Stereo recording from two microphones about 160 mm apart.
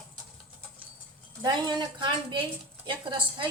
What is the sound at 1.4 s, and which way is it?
A woman's voice, 25° right (ahead or behind).